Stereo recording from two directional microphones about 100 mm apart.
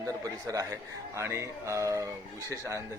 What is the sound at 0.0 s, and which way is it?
A man's voice, 35° right (ahead or behind).